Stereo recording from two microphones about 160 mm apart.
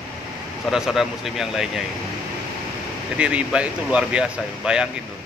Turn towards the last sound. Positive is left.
turn(degrees=-5)  # may be behind; listen again after turning